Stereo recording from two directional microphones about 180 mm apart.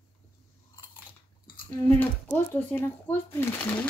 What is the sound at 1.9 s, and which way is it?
Speech, 10° left (ahead or behind).